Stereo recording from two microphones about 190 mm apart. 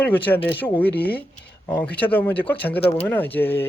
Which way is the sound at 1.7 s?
10° left (ahead or behind).